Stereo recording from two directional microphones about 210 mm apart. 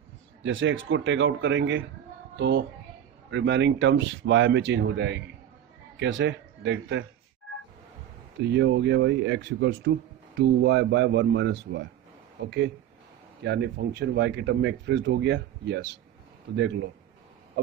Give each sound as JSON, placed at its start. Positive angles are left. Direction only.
{"t": 0.4, "sound": "speech", "side_deg": -65}
{"t": 8.4, "sound": "speech", "side_deg": -55}